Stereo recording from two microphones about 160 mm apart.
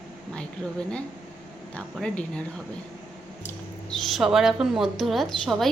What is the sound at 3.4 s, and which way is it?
Speech, 5° left (ahead or behind).